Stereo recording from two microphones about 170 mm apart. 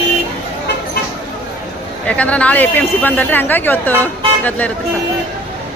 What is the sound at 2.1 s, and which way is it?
Speech, 10° left (ahead or behind).